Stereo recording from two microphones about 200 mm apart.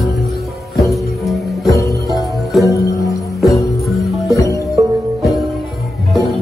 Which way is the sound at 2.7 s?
15° left (ahead or behind).